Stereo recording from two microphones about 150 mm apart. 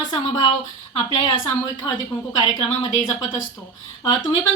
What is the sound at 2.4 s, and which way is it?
Speech, 25° left (ahead or behind).